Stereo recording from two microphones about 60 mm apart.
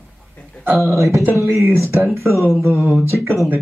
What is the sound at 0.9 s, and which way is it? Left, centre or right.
Speech, right.